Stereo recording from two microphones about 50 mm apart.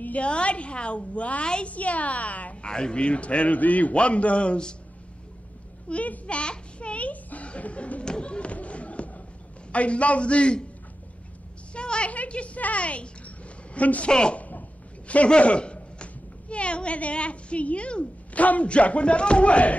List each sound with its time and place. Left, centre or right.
0.0 s a woman's voice: left
2.7 s a woman's voice: centre
5.9 s a sound: left
9.7 s a woman's voice: left
11.7 s a child's voice: left
14.1 s a woman's voice: centre